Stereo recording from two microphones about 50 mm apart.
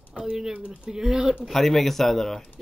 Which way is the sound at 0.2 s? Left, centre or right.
Centre.